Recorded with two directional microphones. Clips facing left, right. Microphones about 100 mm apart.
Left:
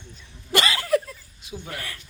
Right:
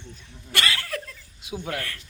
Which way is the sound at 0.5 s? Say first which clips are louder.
Left 7 dB; 25° left (ahead or behind).